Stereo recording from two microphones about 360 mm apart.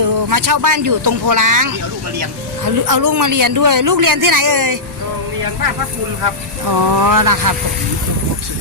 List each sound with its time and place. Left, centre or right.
0.3 s speech: right
6.7 s speech: right